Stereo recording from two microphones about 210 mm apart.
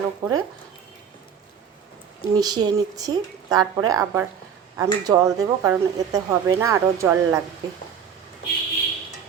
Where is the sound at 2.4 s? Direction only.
20° right (ahead or behind).